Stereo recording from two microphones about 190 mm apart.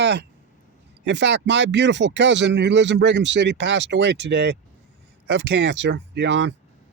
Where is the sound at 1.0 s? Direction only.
65° right (ahead or behind).